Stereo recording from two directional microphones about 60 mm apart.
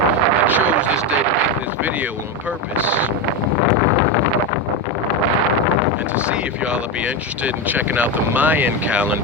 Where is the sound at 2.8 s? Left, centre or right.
Right.